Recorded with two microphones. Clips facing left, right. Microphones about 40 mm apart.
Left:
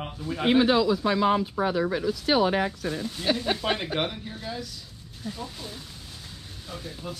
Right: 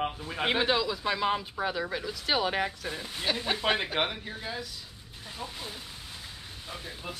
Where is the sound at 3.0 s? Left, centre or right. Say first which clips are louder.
Left 4 dB; right.